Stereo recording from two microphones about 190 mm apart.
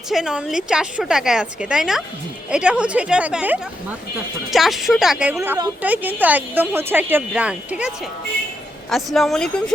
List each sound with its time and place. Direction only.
0.1 s a woman's voice: 5° right (ahead or behind)
5.3 s speech: 15° right (ahead or behind)
8.9 s a woman's voice: centre (ahead or behind)